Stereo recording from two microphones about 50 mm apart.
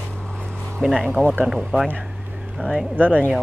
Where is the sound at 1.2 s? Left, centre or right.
Right.